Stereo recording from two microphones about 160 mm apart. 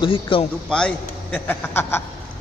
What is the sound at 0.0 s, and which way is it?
Speech, 35° left (ahead or behind).